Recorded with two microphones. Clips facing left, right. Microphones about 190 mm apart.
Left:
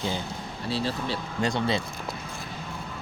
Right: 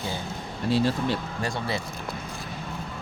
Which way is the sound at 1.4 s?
20° left (ahead or behind).